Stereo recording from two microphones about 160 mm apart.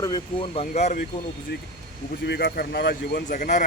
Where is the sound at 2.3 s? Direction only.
85° left; by 3.6 s 55° left (ahead or behind).